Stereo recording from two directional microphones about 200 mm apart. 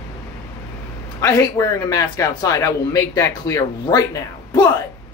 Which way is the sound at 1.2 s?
15° left (ahead or behind).